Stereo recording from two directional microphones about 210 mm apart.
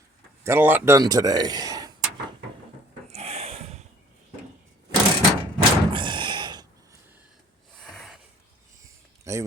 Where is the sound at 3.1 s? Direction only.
30° right (ahead or behind).